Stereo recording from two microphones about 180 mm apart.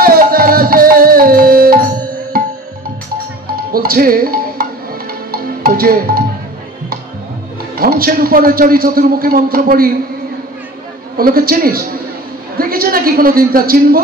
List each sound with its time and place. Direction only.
0.0 s music: 55° right (ahead or behind)
3.7 s music: 55° right (ahead or behind)
7.7 s a man's voice: 55° right (ahead or behind)
11.1 s a man's voice: 55° right (ahead or behind)